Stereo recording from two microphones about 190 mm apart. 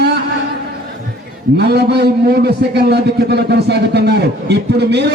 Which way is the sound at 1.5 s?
60° right (ahead or behind).